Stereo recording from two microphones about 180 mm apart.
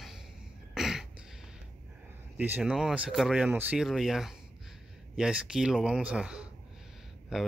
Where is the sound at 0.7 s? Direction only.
Centre (ahead or behind).